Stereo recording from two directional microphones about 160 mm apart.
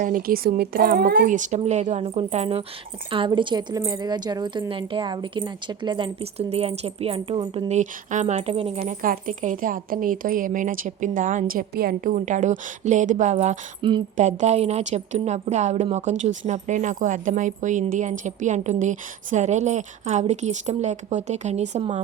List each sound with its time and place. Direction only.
0.0 s a woman's voice: 60° right (ahead or behind); by 7.7 s 30° right (ahead or behind)
7.7 s a woman's voice: 45° right (ahead or behind)
8.9 s a woman's voice: 55° right (ahead or behind)
11.7 s a woman's voice: 70° right (ahead or behind); by 13.6 s 50° right (ahead or behind)
13.8 s speech: 30° right (ahead or behind)
14.2 s a woman's voice: 45° right (ahead or behind)